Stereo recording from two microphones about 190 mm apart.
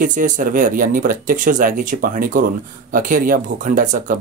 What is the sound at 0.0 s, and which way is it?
Speech, 45° right (ahead or behind).